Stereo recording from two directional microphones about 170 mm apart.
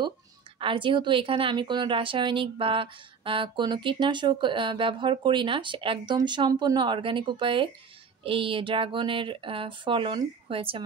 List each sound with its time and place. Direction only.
0.6 s speech: 30° right (ahead or behind)